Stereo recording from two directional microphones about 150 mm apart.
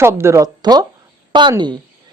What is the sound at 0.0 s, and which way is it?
A woman's voice, 15° right (ahead or behind).